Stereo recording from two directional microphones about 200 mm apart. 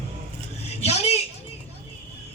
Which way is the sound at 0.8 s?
30° left (ahead or behind).